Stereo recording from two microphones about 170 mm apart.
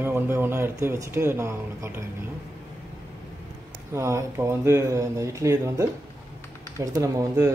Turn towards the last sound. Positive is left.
turn(degrees=-15)  # may be behind; listen again after turning